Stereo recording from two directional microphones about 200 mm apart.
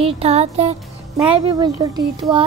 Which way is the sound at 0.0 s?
30° right (ahead or behind).